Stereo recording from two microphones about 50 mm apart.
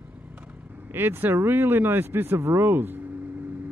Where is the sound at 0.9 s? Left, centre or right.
Right.